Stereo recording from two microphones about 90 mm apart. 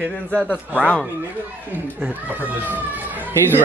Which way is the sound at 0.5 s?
15° right (ahead or behind).